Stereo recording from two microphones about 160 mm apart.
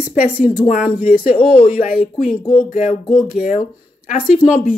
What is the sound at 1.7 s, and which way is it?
Speech, 60° left (ahead or behind).